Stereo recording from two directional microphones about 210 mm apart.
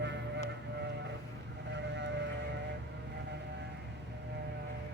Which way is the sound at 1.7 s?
55° right (ahead or behind).